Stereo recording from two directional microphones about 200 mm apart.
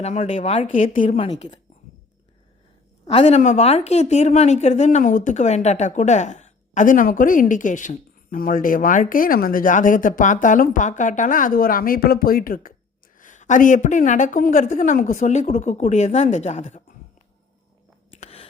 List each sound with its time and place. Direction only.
0.0 s a woman's voice: 35° left (ahead or behind)
1.0 s a woman's voice: 25° left (ahead or behind)
3.1 s a woman's voice: 35° left (ahead or behind)
18.2 s chewing: 30° left (ahead or behind)